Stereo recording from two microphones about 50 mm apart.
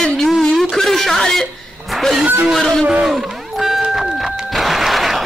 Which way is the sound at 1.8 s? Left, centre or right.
Centre.